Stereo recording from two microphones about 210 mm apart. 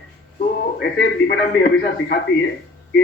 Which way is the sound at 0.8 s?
55° left (ahead or behind).